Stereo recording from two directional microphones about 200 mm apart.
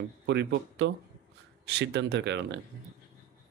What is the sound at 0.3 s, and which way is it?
Speech, 60° right (ahead or behind).